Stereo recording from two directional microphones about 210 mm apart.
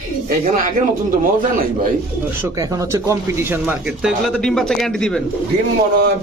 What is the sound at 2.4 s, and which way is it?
Speech, 15° right (ahead or behind).